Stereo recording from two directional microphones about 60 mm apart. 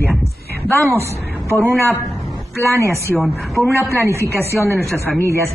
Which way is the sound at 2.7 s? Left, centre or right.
Right.